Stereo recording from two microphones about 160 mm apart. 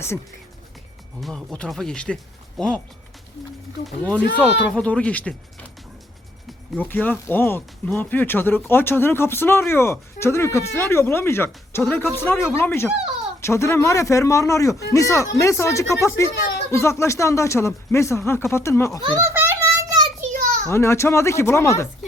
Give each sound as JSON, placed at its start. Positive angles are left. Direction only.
{"t": 1.2, "sound": "speech", "side_deg": 0}
{"t": 3.8, "sound": "speech", "side_deg": 5}
{"t": 6.7, "sound": "speech", "side_deg": 10}
{"t": 19.0, "sound": "children playing", "side_deg": -20}
{"t": 20.2, "sound": "children playing", "side_deg": -60}
{"t": 20.7, "sound": "speech", "side_deg": 15}